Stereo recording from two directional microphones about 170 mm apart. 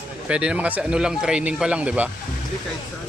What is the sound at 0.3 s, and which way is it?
Speech, 5° right (ahead or behind).